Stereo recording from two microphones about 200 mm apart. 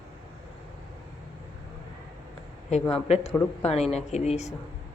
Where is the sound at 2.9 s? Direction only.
30° left (ahead or behind).